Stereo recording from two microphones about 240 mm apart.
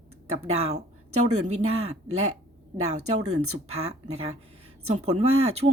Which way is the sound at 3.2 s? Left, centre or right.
Right.